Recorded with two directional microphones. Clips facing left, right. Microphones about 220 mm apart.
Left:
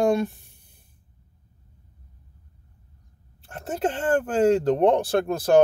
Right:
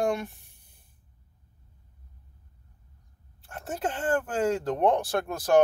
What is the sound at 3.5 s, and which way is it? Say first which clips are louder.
Speech: left 5 dB; 30° left (ahead or behind).